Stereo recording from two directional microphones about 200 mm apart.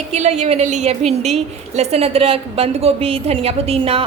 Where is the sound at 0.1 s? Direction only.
35° right (ahead or behind).